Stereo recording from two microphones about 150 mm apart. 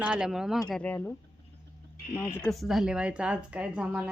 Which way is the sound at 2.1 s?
15° left (ahead or behind).